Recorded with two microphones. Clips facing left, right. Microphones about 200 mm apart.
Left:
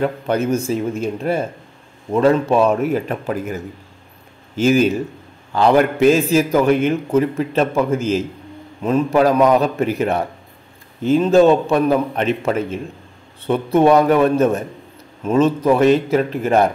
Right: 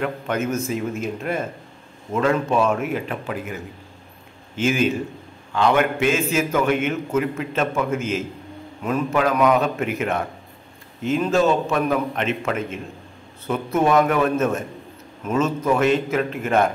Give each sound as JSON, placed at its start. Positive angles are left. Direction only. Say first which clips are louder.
{"t": 0.0, "sound": "a man's voice", "louder": "left 5 dB", "side_deg": 35}